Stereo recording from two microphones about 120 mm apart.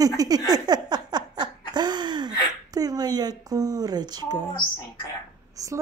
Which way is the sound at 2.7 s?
30° right (ahead or behind).